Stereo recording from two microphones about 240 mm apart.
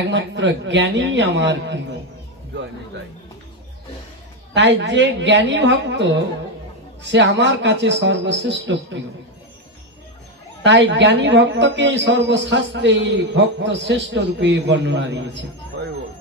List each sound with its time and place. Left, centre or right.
0.1 s a man's voice: right
4.6 s a man's voice: right
10.6 s a man's voice: right